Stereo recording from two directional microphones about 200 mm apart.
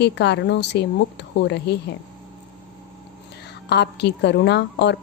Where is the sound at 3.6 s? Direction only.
55° left (ahead or behind).